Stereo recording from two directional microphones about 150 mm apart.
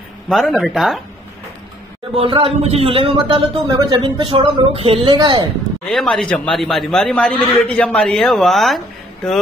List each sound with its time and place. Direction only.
0.3 s a man's voice: centre (ahead or behind)
2.1 s speech: 40° right (ahead or behind)
3.6 s speech: 25° right (ahead or behind)
4.0 s speech: 35° right (ahead or behind)
5.9 s a man's voice: 5° left (ahead or behind)